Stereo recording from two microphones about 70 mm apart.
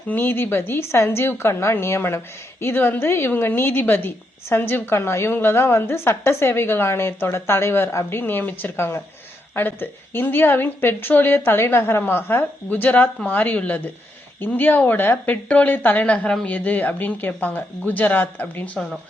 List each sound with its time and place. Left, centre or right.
0.1 s a woman's voice: left